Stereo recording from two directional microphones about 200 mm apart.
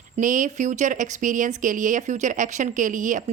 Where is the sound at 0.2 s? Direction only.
40° right (ahead or behind).